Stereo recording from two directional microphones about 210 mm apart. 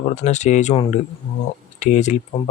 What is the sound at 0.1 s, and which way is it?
Speech, 35° left (ahead or behind).